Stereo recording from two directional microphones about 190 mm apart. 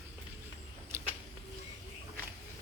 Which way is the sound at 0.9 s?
10° right (ahead or behind).